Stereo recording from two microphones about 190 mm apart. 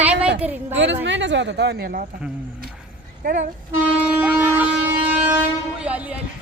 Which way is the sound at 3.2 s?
45° right (ahead or behind).